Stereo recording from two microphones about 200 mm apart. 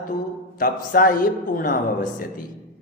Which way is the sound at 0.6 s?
45° left (ahead or behind).